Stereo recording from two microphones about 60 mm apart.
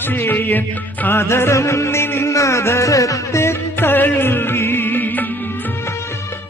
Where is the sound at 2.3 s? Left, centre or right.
Left.